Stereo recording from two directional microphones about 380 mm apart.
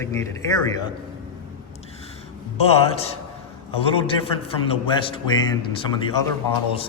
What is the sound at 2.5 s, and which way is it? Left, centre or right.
Speech, centre.